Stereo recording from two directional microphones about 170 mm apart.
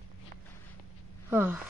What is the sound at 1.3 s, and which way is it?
Speech, 10° right (ahead or behind).